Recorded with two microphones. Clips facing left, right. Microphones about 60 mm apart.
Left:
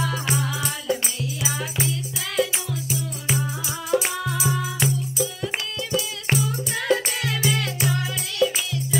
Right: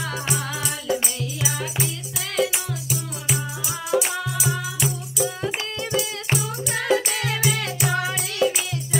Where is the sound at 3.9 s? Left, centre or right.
Centre.